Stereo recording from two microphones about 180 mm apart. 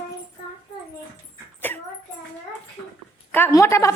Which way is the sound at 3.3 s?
15° left (ahead or behind).